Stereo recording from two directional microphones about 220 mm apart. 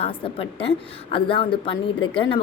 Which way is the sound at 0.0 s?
25° left (ahead or behind).